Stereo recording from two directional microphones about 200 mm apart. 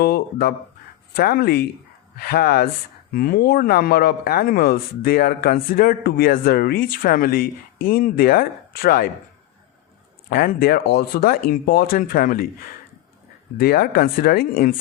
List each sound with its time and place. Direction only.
0.0 s speech: 50° left (ahead or behind)
10.2 s speech: 50° left (ahead or behind)
13.6 s speech: 50° left (ahead or behind)